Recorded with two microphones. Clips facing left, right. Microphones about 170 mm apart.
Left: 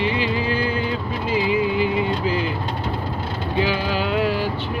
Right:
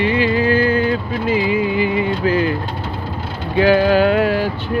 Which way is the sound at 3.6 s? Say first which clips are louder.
Right 12 dB; 55° right (ahead or behind).